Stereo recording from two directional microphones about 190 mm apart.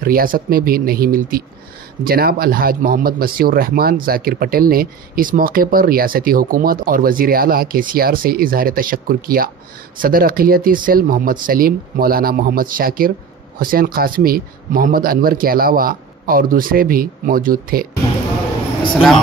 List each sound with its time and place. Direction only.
0.0 s speech: 50° right (ahead or behind)